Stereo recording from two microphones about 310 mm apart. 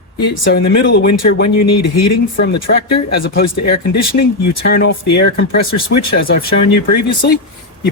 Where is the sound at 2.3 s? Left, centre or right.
Left.